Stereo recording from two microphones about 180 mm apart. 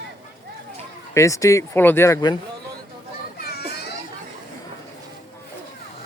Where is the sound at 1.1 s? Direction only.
15° left (ahead or behind).